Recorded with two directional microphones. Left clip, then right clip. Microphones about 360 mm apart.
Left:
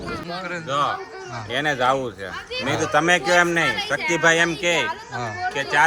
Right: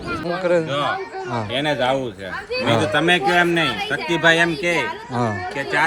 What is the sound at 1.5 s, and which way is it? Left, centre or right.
Speech, left.